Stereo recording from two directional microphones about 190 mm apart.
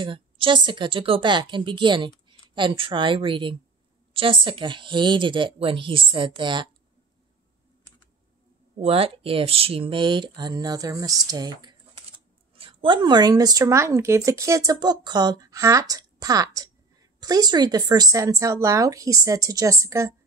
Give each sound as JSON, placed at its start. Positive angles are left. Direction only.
{"t": 0.0, "sound": "speech", "side_deg": -25}
{"t": 8.7, "sound": "a woman's voice", "side_deg": -30}